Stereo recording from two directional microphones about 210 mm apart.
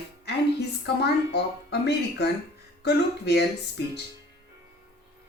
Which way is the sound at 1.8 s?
50° left (ahead or behind).